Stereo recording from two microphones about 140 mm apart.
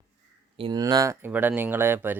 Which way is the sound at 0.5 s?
40° right (ahead or behind).